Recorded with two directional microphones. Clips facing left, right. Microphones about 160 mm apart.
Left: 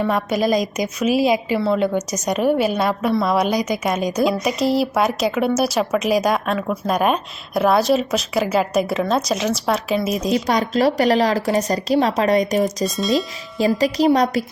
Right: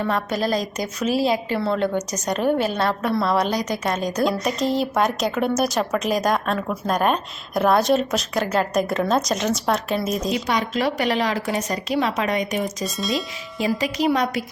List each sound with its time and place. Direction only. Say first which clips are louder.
0.0 s a woman's voice: left 4 dB; 10° left (ahead or behind)
10.3 s speech: left 4 dB; 35° left (ahead or behind)
12.8 s a woman's voice: left 6 dB; centre (ahead or behind)
13.6 s speech: left 5 dB; 35° left (ahead or behind)